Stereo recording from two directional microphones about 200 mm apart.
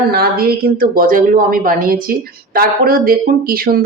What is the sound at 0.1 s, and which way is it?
A woman's voice, 50° right (ahead or behind).